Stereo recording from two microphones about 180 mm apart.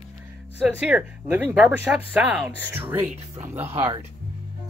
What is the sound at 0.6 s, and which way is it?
Speech, 10° right (ahead or behind).